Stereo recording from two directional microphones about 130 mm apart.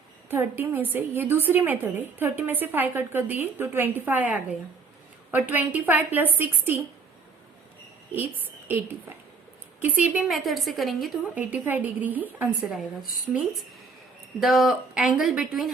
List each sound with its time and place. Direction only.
0.3 s a woman's voice: 15° right (ahead or behind)
8.1 s a woman's voice: 15° right (ahead or behind)
10.2 s speech: centre (ahead or behind)
11.3 s a woman's voice: 10° right (ahead or behind)
12.7 s speech: centre (ahead or behind)